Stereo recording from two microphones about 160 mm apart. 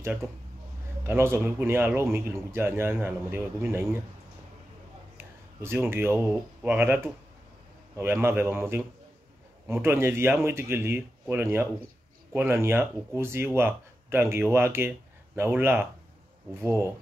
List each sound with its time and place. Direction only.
0.0 s speech: 15° right (ahead or behind)
5.1 s speech: 15° right (ahead or behind)